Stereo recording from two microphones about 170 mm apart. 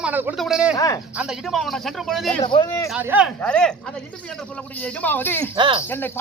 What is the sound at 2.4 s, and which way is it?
Speech, 30° left (ahead or behind).